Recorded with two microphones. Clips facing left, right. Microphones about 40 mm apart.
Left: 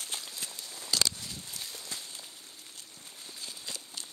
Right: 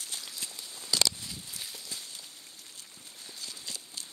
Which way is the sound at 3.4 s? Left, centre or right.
Left.